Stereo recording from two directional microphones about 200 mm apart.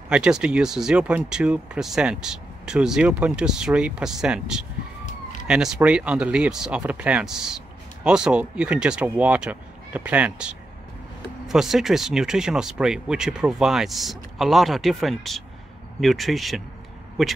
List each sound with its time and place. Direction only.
0.1 s speech: 5° right (ahead or behind)
5.0 s a sound: 40° left (ahead or behind)
5.5 s speech: 5° right (ahead or behind)